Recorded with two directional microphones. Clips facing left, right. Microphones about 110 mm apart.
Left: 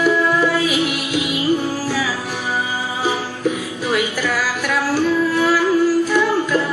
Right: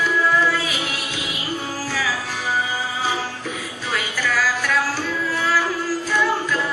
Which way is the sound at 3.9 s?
15° left (ahead or behind).